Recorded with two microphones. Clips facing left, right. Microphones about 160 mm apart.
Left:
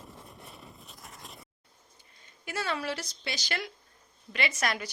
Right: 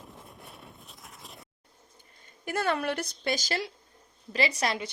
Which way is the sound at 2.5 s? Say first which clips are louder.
Right 4 dB; 55° right (ahead or behind).